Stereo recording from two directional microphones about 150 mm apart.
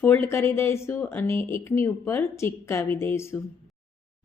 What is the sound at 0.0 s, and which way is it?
Speech, 15° left (ahead or behind).